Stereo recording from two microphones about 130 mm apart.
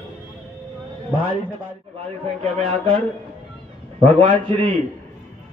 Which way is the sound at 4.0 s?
40° right (ahead or behind).